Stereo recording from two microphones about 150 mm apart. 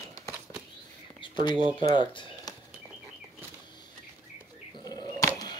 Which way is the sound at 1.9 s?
30° left (ahead or behind).